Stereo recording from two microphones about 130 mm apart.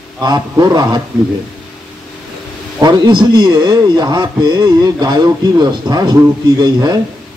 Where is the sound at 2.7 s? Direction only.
35° right (ahead or behind).